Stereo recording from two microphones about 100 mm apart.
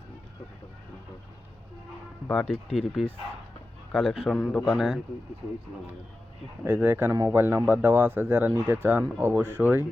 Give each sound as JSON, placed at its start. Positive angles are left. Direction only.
{"t": 2.3, "sound": "speech", "side_deg": 10}
{"t": 6.7, "sound": "speech", "side_deg": -20}